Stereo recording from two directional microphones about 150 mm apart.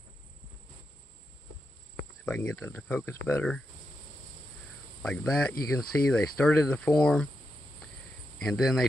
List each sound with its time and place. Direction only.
2.2 s speech: 15° left (ahead or behind)
5.0 s speech: 5° left (ahead or behind)
8.4 s speech: centre (ahead or behind)